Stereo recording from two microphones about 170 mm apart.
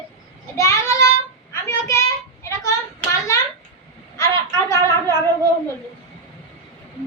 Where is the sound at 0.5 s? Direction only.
20° left (ahead or behind).